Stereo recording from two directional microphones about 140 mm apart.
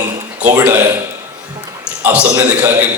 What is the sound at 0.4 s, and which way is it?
Speech, 15° right (ahead or behind).